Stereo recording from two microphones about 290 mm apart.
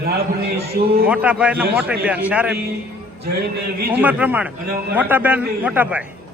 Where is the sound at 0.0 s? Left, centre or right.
Right.